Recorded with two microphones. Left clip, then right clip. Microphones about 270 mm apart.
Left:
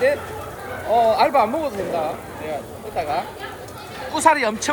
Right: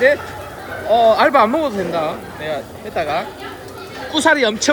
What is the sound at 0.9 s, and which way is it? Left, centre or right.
Speech, right.